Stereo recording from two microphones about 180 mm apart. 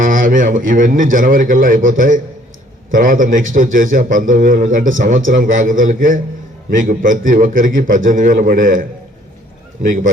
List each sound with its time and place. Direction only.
0.0 s a man's voice: 45° right (ahead or behind)